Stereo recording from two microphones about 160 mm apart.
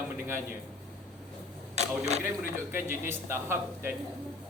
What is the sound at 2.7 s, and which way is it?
Speech, 15° right (ahead or behind).